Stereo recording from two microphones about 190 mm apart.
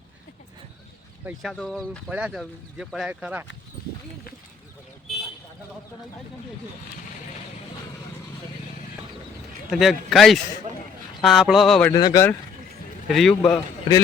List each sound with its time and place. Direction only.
1.2 s speech: 5° right (ahead or behind)
9.6 s speech: centre (ahead or behind)
11.9 s a man's voice: 20° left (ahead or behind)
13.1 s a man's voice: centre (ahead or behind)
13.4 s a man's voice: 15° left (ahead or behind)